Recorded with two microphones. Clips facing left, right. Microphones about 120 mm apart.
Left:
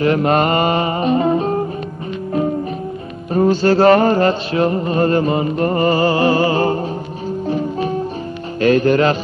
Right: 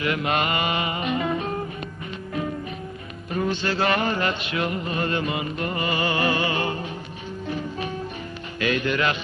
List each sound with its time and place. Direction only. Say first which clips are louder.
0.0 s music: left 10 dB; 40° left (ahead or behind)
3.3 s music: left 12 dB; 40° left (ahead or behind)